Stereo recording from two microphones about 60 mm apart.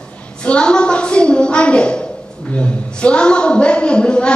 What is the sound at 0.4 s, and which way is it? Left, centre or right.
A woman's voice, centre.